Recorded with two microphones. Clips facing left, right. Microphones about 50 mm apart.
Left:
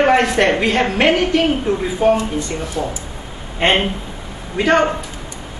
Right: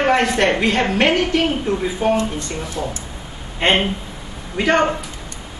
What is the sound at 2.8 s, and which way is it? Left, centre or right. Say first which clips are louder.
Speech: left 3 dB; left.